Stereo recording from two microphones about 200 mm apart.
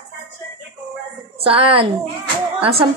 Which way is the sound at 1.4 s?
30° right (ahead or behind).